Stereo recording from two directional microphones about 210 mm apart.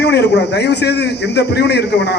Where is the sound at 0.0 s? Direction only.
55° left (ahead or behind).